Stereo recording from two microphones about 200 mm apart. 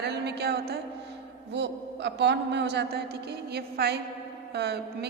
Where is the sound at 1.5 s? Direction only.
60° right (ahead or behind).